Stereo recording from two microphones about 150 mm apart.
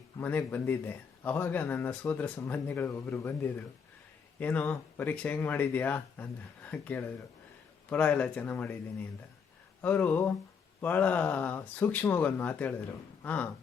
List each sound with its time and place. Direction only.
0.2 s a man's voice: 10° left (ahead or behind)